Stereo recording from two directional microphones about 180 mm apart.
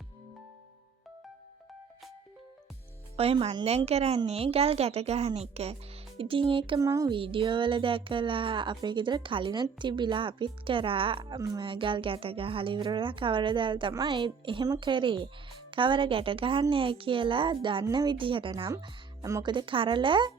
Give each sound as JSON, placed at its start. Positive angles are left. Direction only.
{"t": 3.2, "sound": "a woman's voice", "side_deg": -35}
{"t": 7.2, "sound": "speech", "side_deg": -30}
{"t": 18.7, "sound": "speech", "side_deg": -20}